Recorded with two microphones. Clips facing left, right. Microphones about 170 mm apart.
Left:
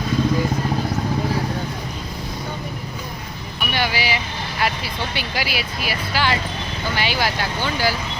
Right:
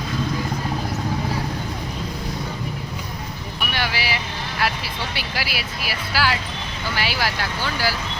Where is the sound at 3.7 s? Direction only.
Centre (ahead or behind).